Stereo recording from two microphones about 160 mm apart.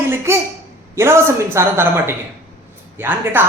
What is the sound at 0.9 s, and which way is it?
Speech, 15° right (ahead or behind).